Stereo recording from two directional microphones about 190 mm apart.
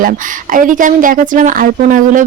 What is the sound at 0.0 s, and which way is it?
A woman's voice, 45° right (ahead or behind).